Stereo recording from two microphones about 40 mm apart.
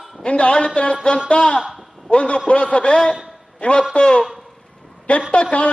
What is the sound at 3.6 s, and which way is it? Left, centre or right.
Speech, left.